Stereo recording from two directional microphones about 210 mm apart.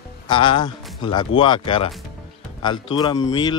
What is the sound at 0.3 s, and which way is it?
Speech, 25° left (ahead or behind).